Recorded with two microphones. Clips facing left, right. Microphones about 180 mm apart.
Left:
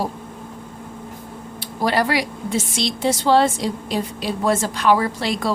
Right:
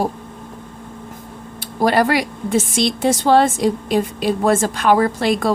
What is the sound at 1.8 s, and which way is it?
A woman's voice, 50° right (ahead or behind).